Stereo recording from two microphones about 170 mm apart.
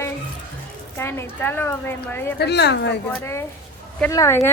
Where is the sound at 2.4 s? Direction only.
80° left.